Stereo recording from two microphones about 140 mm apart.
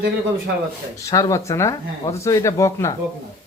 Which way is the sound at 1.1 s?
25° left (ahead or behind).